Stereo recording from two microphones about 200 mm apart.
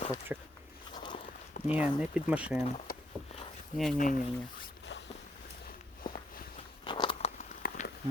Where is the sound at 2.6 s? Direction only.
45° left (ahead or behind).